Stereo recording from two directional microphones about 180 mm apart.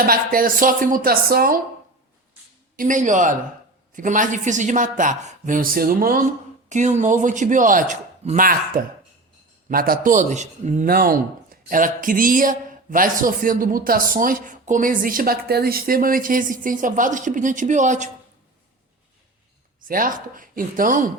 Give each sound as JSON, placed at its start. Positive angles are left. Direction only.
{"t": 0.0, "sound": "a man's voice", "side_deg": -55}
{"t": 2.7, "sound": "a man's voice", "side_deg": -45}
{"t": 6.7, "sound": "a man's voice", "side_deg": -40}
{"t": 19.9, "sound": "a man's voice", "side_deg": -50}